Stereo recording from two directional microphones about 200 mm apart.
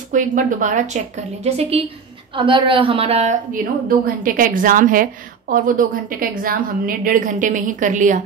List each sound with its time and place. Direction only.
0.1 s a woman's voice: 40° right (ahead or behind)